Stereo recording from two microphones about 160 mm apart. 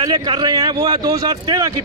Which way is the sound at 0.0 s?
25° right (ahead or behind).